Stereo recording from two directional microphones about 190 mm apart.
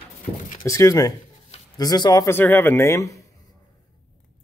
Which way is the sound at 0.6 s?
15° left (ahead or behind).